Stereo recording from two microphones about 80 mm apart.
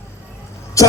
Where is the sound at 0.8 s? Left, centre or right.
Left.